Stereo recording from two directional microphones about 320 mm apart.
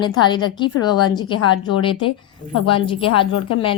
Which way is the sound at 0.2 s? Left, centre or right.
Centre.